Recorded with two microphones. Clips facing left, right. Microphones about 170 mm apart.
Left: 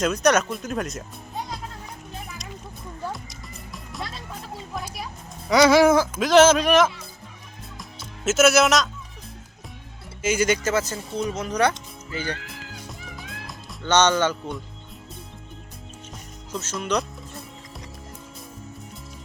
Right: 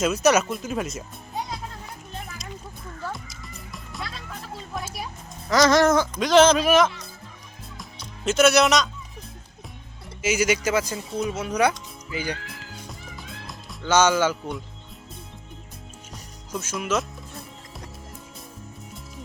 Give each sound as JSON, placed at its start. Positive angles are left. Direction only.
{"t": 0.0, "sound": "speech", "side_deg": -5}
{"t": 3.1, "sound": "music", "side_deg": 0}
{"t": 5.5, "sound": "speech", "side_deg": 10}
{"t": 7.8, "sound": "music", "side_deg": 5}
{"t": 10.2, "sound": "speech", "side_deg": -10}
{"t": 12.5, "sound": "music", "side_deg": 0}
{"t": 16.5, "sound": "speech", "side_deg": -10}
{"t": 16.7, "sound": "music", "side_deg": 0}